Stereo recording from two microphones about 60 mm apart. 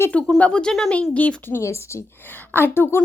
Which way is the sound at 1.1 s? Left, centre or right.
Left.